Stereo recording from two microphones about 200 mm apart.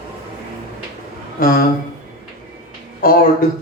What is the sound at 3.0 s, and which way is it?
Speech, 45° left (ahead or behind).